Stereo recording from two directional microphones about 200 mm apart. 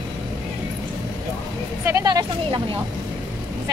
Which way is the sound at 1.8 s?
15° right (ahead or behind).